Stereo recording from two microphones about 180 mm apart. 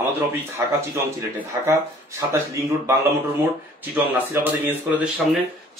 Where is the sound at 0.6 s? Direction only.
15° right (ahead or behind).